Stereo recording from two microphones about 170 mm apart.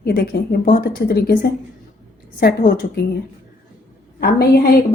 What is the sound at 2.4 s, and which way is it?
Speech, 70° left (ahead or behind).